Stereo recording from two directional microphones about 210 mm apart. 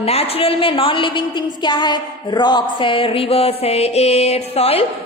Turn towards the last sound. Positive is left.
turn(degrees=30)  # may be behind; listen again after turning